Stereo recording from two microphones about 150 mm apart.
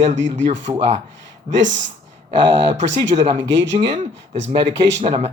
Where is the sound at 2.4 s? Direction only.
30° right (ahead or behind).